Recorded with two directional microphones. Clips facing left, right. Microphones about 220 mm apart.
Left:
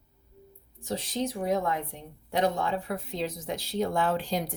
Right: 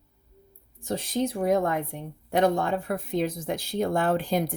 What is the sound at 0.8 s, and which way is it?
A woman's voice, 50° right (ahead or behind).